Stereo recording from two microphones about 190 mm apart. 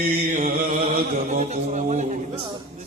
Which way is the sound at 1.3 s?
40° right (ahead or behind).